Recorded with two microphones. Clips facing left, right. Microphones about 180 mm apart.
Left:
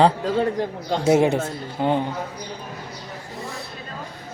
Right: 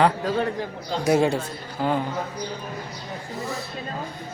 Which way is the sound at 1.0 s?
20° left (ahead or behind).